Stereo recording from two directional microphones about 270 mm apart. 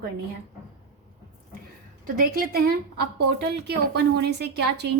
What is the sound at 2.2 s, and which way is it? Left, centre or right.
A woman's voice, right.